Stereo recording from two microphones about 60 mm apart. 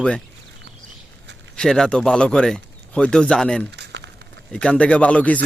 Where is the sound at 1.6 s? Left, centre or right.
Centre.